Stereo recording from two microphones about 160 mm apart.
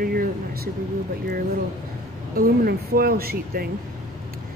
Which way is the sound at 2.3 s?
70° right (ahead or behind).